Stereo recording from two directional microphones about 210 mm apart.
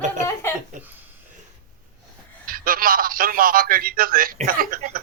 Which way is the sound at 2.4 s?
45° right (ahead or behind).